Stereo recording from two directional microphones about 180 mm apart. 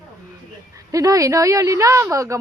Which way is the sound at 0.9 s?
20° right (ahead or behind).